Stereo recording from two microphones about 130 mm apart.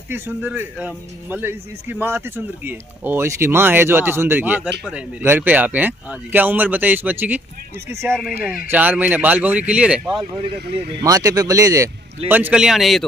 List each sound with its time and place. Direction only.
0.1 s speech: 15° right (ahead or behind)
8.1 s a man's voice: centre (ahead or behind)
8.6 s speech: 10° right (ahead or behind)
11.0 s speech: 25° right (ahead or behind)
12.3 s a man's voice: 15° right (ahead or behind)